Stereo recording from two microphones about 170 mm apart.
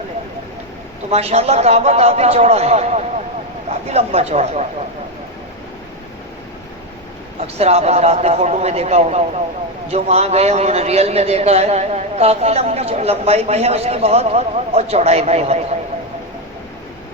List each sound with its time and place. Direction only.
1.1 s a man's voice: 40° right (ahead or behind)
7.4 s a man's voice: 40° right (ahead or behind)